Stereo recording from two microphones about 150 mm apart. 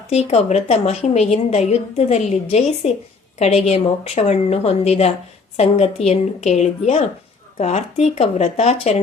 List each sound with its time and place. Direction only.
0.1 s a woman's voice: 45° left (ahead or behind)